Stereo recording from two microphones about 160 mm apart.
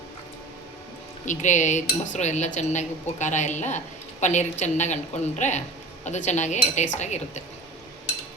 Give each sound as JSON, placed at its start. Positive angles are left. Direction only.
{"t": 1.2, "sound": "speech", "side_deg": 50}